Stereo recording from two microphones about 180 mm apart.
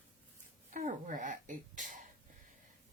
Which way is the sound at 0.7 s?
45° right (ahead or behind).